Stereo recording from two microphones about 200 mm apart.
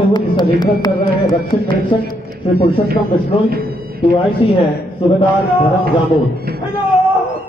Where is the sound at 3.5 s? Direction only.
50° right (ahead or behind).